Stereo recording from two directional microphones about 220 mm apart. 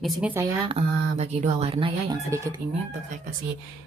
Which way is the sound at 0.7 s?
30° right (ahead or behind).